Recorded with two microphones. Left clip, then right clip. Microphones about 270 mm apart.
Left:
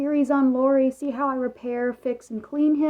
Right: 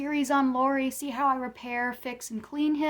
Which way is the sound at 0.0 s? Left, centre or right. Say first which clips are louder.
Left 4 dB; right.